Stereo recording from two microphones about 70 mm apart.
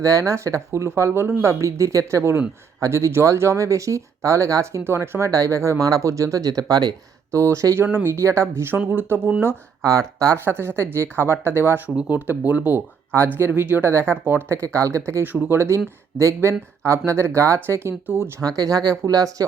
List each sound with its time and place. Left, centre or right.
0.0 s speech: right
4.8 s speech: right
7.3 s speech: right
7.9 s speech: right
8.9 s speech: right
9.8 s speech: right
10.3 s speech: right
14.6 s speech: right
15.2 s speech: right
18.4 s speech: right